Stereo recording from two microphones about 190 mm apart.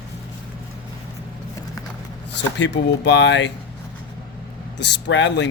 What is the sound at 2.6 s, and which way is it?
Speech, 65° left (ahead or behind).